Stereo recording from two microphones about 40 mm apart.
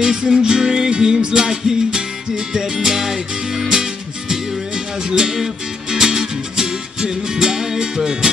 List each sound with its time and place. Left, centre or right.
0.0 s music: centre
5.1 s music: centre